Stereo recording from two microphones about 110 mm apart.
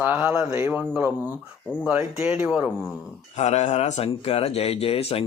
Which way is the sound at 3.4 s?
90° left.